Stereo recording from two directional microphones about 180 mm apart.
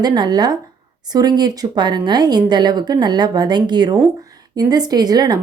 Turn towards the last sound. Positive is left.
turn(degrees=-20)  # may be behind; listen again after turning